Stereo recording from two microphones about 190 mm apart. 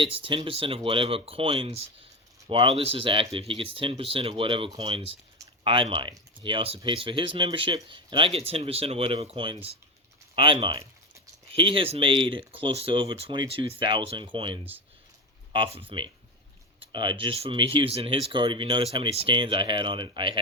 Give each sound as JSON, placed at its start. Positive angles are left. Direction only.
{"t": 0.0, "sound": "speech", "side_deg": -25}